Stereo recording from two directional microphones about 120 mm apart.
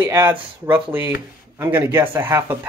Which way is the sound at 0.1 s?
15° right (ahead or behind).